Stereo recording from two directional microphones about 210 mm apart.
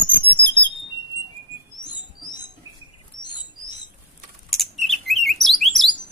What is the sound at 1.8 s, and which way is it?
Rodents, 20° left (ahead or behind).